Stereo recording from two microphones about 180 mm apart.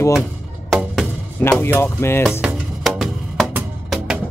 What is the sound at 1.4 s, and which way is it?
Speech, 10° left (ahead or behind).